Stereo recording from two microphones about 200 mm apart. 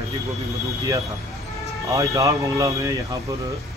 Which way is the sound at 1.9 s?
15° right (ahead or behind).